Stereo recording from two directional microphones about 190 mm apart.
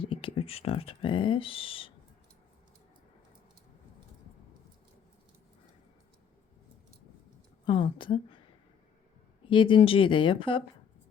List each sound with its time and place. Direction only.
0.0 s speech: 25° left (ahead or behind)
7.6 s a woman's voice: 25° left (ahead or behind)
9.5 s speech: 25° left (ahead or behind)